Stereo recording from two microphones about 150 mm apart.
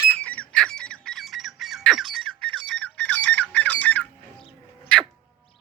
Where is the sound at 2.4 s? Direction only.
35° right (ahead or behind).